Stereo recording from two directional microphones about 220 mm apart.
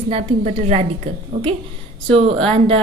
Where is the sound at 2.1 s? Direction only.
25° right (ahead or behind).